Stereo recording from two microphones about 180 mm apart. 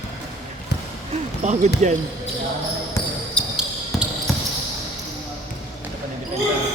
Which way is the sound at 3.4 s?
5° left (ahead or behind).